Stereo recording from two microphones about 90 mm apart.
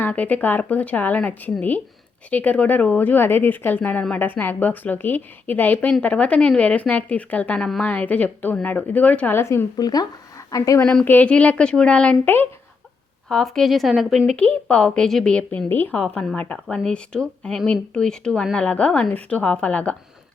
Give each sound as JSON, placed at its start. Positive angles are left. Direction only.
{"t": 0.0, "sound": "a woman's voice", "side_deg": 20}
{"t": 9.4, "sound": "a woman's voice", "side_deg": 30}
{"t": 9.7, "sound": "a woman's voice", "side_deg": 45}
{"t": 11.0, "sound": "speech", "side_deg": 20}
{"t": 13.2, "sound": "speech", "side_deg": 5}
{"t": 14.3, "sound": "speech", "side_deg": 15}
{"t": 14.8, "sound": "speech", "side_deg": 5}
{"t": 15.7, "sound": "a woman's voice", "side_deg": 25}